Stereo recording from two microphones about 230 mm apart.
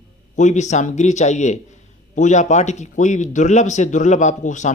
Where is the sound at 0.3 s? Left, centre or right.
Left.